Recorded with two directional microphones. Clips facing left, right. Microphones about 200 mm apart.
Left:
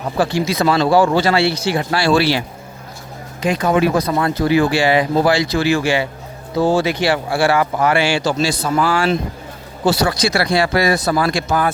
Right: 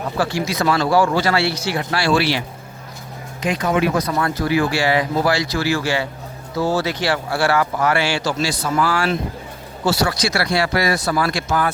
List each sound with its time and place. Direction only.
0.2 s speech: 30° left (ahead or behind)
3.4 s speech: 35° left (ahead or behind)